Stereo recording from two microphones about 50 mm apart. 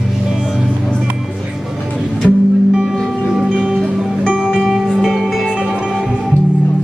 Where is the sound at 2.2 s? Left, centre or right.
Left.